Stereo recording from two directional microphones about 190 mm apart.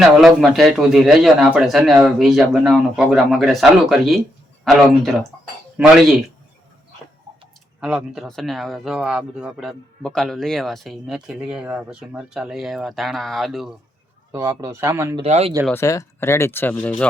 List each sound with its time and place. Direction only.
0.0 s speech: centre (ahead or behind)
7.8 s speech: 5° right (ahead or behind)
14.3 s speech: 15° right (ahead or behind)
15.1 s speech: 30° right (ahead or behind)
15.7 s speech: 15° left (ahead or behind)